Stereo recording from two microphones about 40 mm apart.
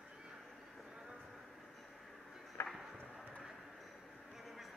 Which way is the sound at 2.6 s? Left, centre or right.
Left.